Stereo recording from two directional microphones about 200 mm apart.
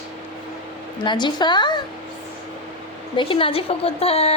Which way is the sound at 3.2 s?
25° left (ahead or behind).